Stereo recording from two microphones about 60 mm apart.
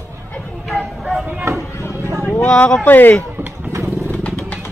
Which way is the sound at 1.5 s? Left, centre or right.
Right.